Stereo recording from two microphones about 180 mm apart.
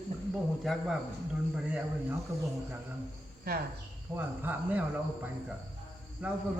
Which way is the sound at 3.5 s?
60° right (ahead or behind).